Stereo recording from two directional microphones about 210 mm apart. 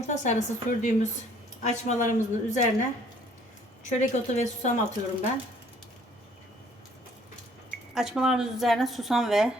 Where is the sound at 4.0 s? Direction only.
35° left (ahead or behind).